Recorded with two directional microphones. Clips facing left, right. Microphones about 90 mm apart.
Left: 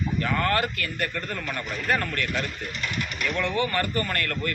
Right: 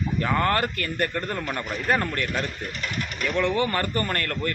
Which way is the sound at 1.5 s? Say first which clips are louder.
Right 2 dB; 25° right (ahead or behind).